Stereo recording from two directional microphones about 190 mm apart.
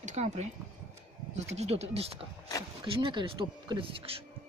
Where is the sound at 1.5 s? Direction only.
35° right (ahead or behind).